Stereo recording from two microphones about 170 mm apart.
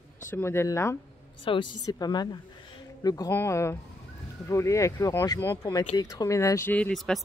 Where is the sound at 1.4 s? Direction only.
30° left (ahead or behind).